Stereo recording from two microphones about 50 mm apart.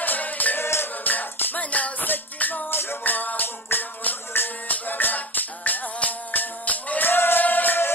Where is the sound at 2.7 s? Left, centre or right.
Left.